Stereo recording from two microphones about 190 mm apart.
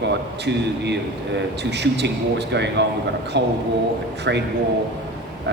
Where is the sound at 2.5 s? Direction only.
65° right (ahead or behind).